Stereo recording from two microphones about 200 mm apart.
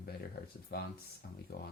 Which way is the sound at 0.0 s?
50° left (ahead or behind).